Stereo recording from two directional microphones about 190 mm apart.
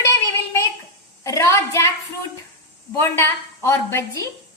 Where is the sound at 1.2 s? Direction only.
15° left (ahead or behind).